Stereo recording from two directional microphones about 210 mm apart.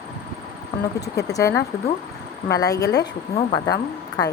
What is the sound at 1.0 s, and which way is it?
A woman's voice, 15° left (ahead or behind).